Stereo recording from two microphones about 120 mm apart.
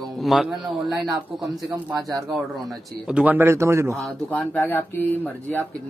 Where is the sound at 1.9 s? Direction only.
30° right (ahead or behind).